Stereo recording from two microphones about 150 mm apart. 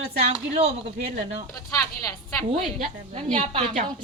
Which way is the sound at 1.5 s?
20° left (ahead or behind).